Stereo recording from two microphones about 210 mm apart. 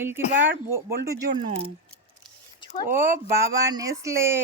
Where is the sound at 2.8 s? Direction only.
10° right (ahead or behind).